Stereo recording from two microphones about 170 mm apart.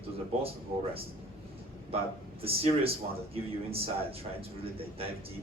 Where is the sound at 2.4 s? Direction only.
35° right (ahead or behind).